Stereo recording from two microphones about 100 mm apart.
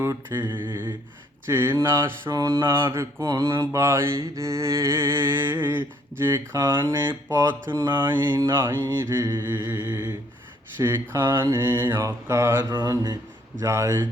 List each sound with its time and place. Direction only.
0.0 s mantra: 25° right (ahead or behind)
0.4 s a sound: 50° right (ahead or behind)
1.5 s mantra: 25° right (ahead or behind)
7.9 s a sound: 50° right (ahead or behind)
8.5 s mantra: 25° right (ahead or behind)
12.6 s speech: 40° right (ahead or behind)
13.7 s mantra: 30° right (ahead or behind)